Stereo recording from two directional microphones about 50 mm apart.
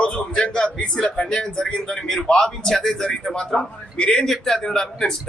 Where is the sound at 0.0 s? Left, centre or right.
Left.